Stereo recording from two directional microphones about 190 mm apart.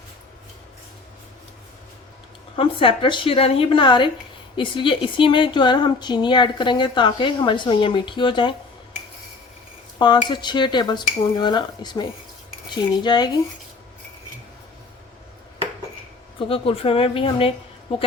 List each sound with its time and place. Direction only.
2.6 s a woman's voice: 30° left (ahead or behind)
10.2 s a woman's voice: 25° left (ahead or behind)
16.5 s a woman's voice: 30° left (ahead or behind)